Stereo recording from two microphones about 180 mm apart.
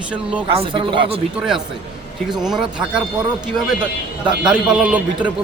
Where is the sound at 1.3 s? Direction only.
5° right (ahead or behind).